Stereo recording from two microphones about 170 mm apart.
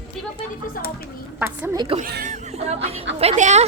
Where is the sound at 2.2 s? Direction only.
40° right (ahead or behind).